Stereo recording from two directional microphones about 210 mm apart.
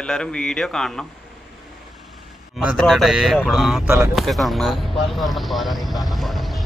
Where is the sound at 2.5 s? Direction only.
Centre (ahead or behind).